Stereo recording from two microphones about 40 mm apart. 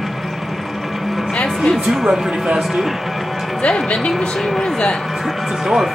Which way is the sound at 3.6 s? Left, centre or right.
Left.